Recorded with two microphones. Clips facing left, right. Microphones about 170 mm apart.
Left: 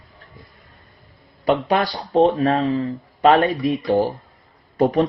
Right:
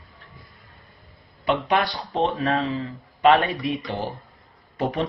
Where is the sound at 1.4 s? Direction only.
40° left (ahead or behind).